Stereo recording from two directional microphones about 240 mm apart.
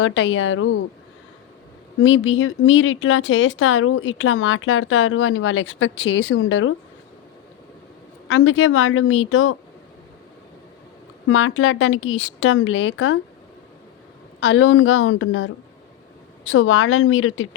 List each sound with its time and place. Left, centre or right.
0.0 s speech: left
2.0 s speech: left
8.3 s speech: left
11.3 s speech: left
14.4 s speech: left